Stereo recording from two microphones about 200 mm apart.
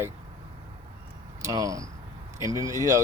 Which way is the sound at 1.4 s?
15° right (ahead or behind).